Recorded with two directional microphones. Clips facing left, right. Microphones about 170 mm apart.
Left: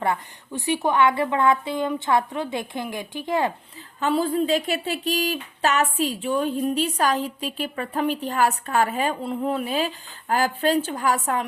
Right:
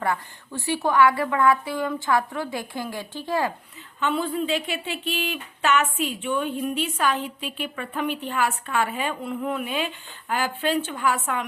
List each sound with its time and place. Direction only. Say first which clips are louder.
0.0 s a woman's voice: left 1 dB; 20° left (ahead or behind)
4.0 s speech: left 3 dB; 35° left (ahead or behind)